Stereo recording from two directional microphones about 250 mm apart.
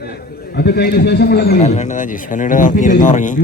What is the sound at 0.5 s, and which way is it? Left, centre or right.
A man's voice, left.